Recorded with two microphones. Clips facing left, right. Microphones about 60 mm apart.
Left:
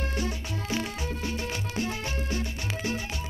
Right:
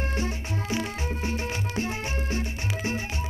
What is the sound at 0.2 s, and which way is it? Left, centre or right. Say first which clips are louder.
Music: right 1 dB; right.